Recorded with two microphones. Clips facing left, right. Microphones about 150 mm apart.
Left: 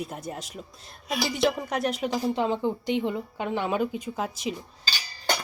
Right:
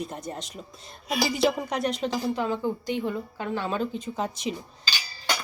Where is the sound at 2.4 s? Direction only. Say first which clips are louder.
Left 2 dB; 20° left (ahead or behind); by 4.5 s 5° left (ahead or behind).